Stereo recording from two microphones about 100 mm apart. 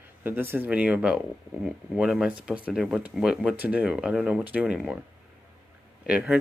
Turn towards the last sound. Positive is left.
turn(degrees=-10)  # may be behind; listen again after turning